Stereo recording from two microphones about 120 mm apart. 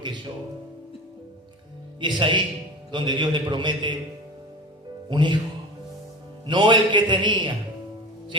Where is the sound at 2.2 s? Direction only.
40° right (ahead or behind).